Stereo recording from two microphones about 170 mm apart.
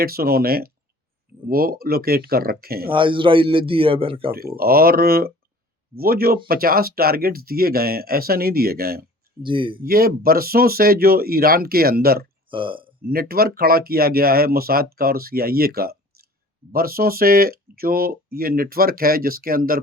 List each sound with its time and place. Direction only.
0.0 s speech: 60° right (ahead or behind)
2.9 s speech: 30° right (ahead or behind)
4.3 s speech: 60° right (ahead or behind)
9.4 s speech: 30° right (ahead or behind)
9.8 s speech: 60° right (ahead or behind)
12.5 s speech: 30° right (ahead or behind)
13.1 s speech: 60° right (ahead or behind)